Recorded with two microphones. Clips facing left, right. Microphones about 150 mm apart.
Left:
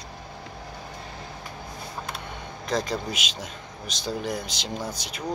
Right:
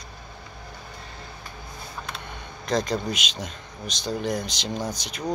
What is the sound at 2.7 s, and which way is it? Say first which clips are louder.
A man's voice: right 3 dB; 5° left (ahead or behind).